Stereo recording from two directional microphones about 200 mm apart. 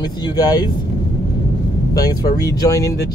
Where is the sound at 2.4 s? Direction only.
20° left (ahead or behind).